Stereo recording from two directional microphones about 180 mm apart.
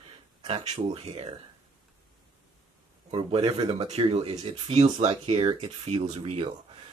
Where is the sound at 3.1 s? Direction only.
30° right (ahead or behind).